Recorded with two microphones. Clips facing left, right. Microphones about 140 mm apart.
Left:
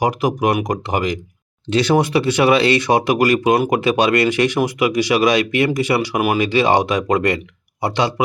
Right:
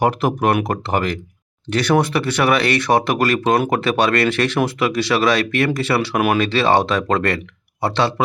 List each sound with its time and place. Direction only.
0.0 s speech: 15° left (ahead or behind)